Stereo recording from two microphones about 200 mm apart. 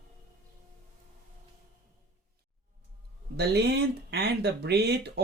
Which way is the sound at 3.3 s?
55° right (ahead or behind).